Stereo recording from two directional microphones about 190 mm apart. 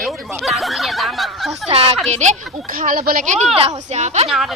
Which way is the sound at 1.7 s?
30° right (ahead or behind).